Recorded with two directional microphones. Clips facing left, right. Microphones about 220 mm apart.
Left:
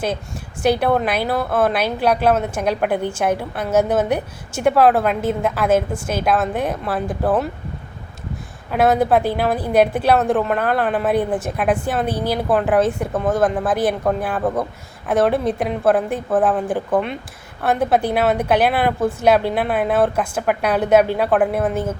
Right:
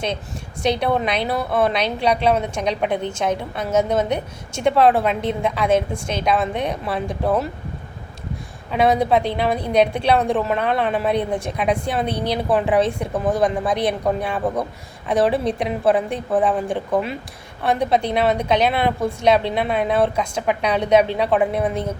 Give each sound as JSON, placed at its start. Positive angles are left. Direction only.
{"t": 0.6, "sound": "a woman's voice", "side_deg": 5}
{"t": 8.7, "sound": "a woman's voice", "side_deg": 5}